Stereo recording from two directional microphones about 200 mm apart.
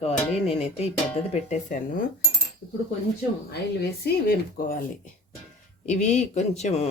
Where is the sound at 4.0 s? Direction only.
50° left (ahead or behind).